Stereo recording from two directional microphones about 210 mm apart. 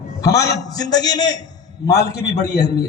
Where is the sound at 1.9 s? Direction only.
50° left (ahead or behind).